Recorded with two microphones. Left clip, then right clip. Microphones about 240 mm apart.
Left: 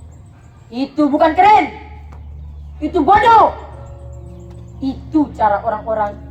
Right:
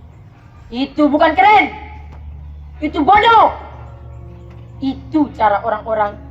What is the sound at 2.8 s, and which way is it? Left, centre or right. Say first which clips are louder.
Speech: even; right.